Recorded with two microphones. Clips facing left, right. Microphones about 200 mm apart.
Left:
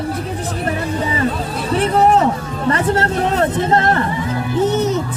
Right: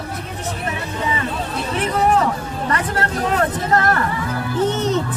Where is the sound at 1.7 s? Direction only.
30° left (ahead or behind).